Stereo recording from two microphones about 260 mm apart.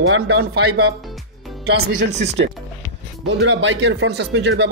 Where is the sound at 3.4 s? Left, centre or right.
Right.